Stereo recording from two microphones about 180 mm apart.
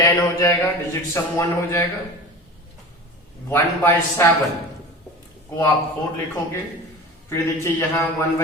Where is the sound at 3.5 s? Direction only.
15° left (ahead or behind).